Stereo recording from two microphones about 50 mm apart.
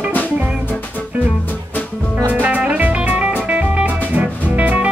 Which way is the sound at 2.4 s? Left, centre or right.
Right.